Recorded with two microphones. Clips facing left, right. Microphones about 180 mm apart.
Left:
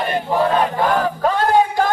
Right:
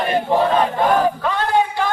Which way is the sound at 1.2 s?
40° left (ahead or behind).